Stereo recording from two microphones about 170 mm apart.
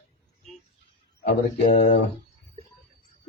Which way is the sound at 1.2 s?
70° left (ahead or behind).